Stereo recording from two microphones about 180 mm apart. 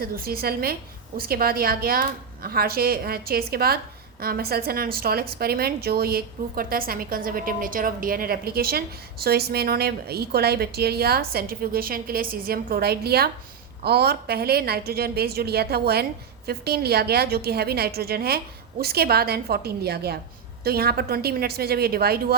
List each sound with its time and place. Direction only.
0.0 s a woman's voice: 60° right (ahead or behind)